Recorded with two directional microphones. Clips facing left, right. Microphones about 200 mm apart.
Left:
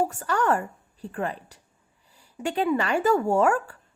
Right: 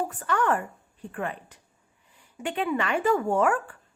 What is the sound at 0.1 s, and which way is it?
Speech, 40° left (ahead or behind).